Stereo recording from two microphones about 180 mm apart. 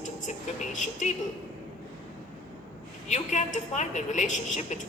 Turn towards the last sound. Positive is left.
turn(degrees=40)  # may be behind; listen again after turning